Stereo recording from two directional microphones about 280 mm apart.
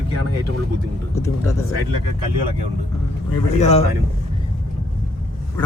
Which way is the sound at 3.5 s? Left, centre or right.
Left.